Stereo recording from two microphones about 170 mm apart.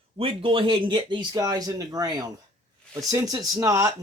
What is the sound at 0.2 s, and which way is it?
Speech, 30° right (ahead or behind).